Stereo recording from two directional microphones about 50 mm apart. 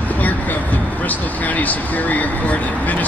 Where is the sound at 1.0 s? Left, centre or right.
Left.